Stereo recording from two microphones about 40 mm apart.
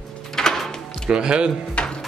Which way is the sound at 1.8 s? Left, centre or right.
Left.